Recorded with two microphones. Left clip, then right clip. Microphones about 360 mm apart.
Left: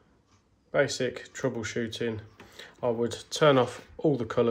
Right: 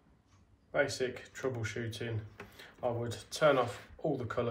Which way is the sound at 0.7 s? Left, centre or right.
Left.